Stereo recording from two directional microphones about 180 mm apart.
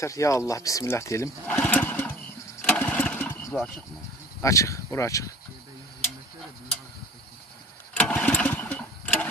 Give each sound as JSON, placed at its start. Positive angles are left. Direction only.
{"t": 0.0, "sound": "speech", "side_deg": 15}
{"t": 1.6, "sound": "lawn mower", "side_deg": 5}
{"t": 4.4, "sound": "speech", "side_deg": 15}
{"t": 7.9, "sound": "engine", "side_deg": 5}